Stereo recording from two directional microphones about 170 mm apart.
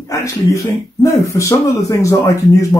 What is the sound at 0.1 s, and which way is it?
Speech, 20° left (ahead or behind).